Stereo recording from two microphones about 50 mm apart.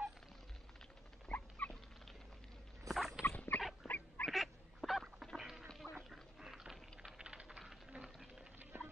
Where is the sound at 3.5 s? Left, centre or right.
Left.